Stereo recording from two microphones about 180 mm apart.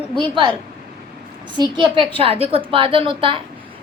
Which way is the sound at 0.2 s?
25° right (ahead or behind).